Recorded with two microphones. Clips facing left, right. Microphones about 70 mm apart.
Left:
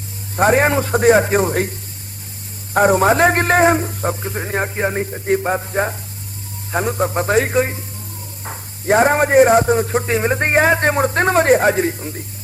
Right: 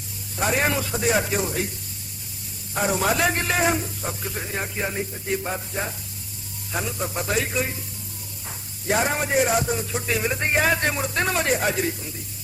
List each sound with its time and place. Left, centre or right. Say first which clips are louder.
0.3 s a man's voice: left 9 dB; left
2.7 s a man's voice: left 10 dB; left